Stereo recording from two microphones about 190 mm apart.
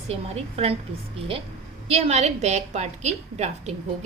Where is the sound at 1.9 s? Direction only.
35° right (ahead or behind).